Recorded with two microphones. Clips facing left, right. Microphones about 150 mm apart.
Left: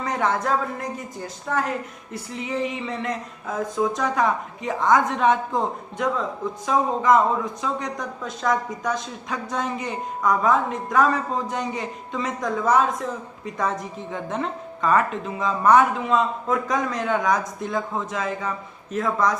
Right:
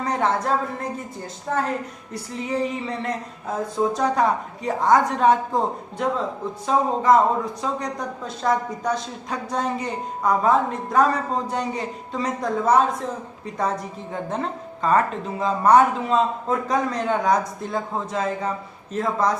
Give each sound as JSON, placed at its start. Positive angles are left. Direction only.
{"t": 0.0, "sound": "a man's voice", "side_deg": -30}